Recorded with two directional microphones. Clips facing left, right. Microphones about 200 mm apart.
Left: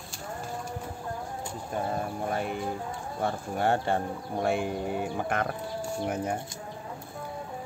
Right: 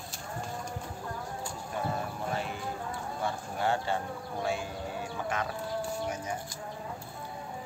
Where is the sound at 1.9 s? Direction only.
55° left (ahead or behind).